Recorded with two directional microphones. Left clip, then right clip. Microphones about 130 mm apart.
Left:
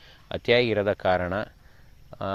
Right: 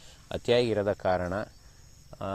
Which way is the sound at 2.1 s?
30° left (ahead or behind).